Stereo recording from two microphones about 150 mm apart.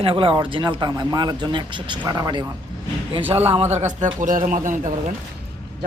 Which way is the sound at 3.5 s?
50° right (ahead or behind).